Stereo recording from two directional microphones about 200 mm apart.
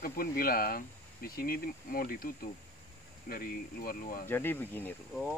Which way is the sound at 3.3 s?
45° left (ahead or behind).